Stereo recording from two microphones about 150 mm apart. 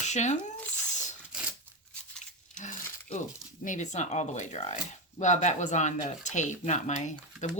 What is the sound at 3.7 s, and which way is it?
Speech, 50° left (ahead or behind).